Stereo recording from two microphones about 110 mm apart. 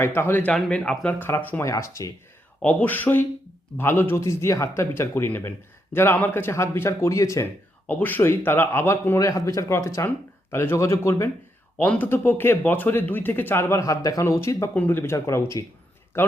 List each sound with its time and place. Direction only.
0.0 s speech: 20° left (ahead or behind)
0.5 s speech: 5° left (ahead or behind)
1.6 s speech: 30° left (ahead or behind)
2.6 s speech: 15° left (ahead or behind)
7.9 s speech: 15° left (ahead or behind)
11.8 s speech: 15° left (ahead or behind)